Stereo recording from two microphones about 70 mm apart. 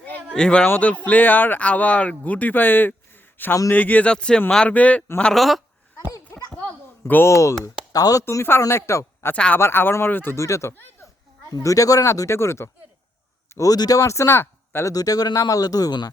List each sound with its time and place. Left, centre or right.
0.3 s speech: centre
0.6 s speech: left
5.3 s speech: centre
7.3 s speech: left
7.9 s speech: left
8.2 s a man's voice: left
9.3 s speech: centre
9.6 s speech: left
10.3 s speech: left
13.6 s speech: left
14.8 s speech: left